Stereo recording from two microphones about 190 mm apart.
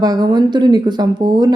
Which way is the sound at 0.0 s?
20° right (ahead or behind).